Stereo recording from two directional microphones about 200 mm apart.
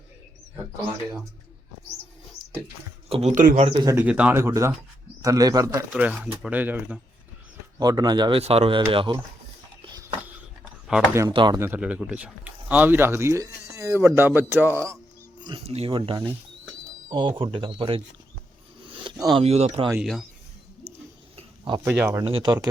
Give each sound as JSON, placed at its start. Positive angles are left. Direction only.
{"t": 3.1, "sound": "speech", "side_deg": -35}
{"t": 3.8, "sound": "speech", "side_deg": -10}
{"t": 7.8, "sound": "speech", "side_deg": -20}
{"t": 9.8, "sound": "a sound", "side_deg": -20}
{"t": 11.1, "sound": "speech", "side_deg": -15}
{"t": 15.4, "sound": "speech", "side_deg": -25}
{"t": 19.0, "sound": "speech", "side_deg": -25}
{"t": 19.9, "sound": "speech", "side_deg": -5}
{"t": 21.3, "sound": "cricket", "side_deg": -25}
{"t": 21.8, "sound": "speech", "side_deg": -10}
{"t": 22.2, "sound": "speech", "side_deg": -25}